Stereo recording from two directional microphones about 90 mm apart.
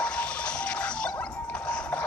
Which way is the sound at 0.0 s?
10° left (ahead or behind).